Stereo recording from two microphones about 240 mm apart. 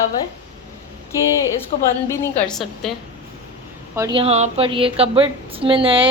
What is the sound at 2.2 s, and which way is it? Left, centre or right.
Speech, centre.